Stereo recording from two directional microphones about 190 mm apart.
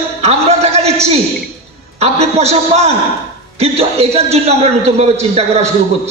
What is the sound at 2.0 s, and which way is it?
A man's voice, 35° right (ahead or behind).